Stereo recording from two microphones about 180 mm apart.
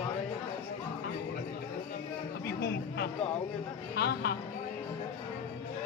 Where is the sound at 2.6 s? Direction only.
65° left (ahead or behind).